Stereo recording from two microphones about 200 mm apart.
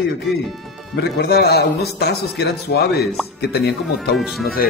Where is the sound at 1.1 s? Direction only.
55° left (ahead or behind).